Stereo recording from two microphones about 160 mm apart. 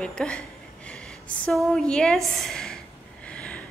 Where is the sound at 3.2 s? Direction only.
5° left (ahead or behind).